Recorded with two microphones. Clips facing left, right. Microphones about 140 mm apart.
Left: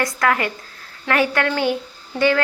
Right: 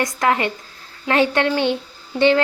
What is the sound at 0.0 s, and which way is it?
A woman's voice, 25° right (ahead or behind).